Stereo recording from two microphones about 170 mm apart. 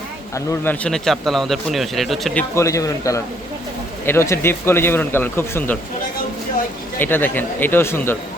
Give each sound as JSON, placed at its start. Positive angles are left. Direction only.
{"t": 0.3, "sound": "speech", "side_deg": 10}
{"t": 2.6, "sound": "a man's voice", "side_deg": 20}
{"t": 7.0, "sound": "a man's voice", "side_deg": 10}